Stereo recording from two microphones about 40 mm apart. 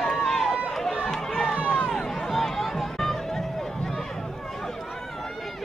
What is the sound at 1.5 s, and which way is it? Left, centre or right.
Run, centre.